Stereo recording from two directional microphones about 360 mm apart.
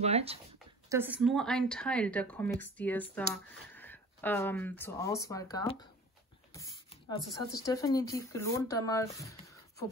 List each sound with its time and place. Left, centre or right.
0.0 s speech: centre
0.8 s speech: centre
7.6 s speech: centre